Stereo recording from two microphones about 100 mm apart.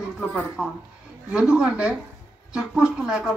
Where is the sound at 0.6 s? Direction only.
5° right (ahead or behind).